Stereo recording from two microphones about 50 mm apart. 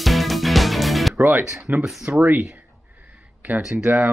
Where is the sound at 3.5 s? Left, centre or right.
Right.